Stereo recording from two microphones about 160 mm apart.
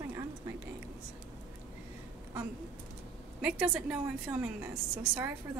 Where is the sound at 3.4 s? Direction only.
5° right (ahead or behind).